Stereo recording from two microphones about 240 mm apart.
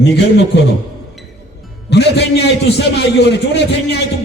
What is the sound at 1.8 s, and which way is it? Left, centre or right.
Speech, left.